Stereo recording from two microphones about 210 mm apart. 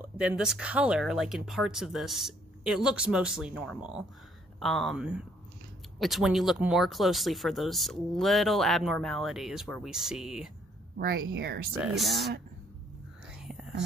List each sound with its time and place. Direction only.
0.2 s speech: 5° right (ahead or behind)
11.0 s speech: 45° right (ahead or behind)
11.8 s speech: centre (ahead or behind)